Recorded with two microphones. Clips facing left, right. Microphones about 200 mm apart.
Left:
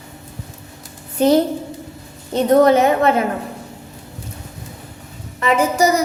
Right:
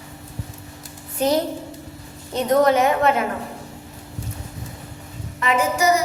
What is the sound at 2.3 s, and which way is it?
Speech, 30° left (ahead or behind).